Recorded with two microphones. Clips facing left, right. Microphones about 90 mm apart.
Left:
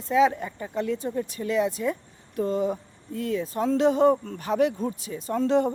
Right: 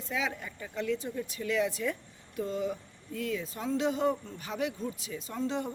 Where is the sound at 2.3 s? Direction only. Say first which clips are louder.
Left 7 dB; 45° left (ahead or behind).